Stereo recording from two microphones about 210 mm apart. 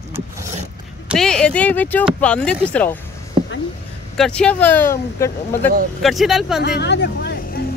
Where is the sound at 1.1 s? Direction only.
5° left (ahead or behind).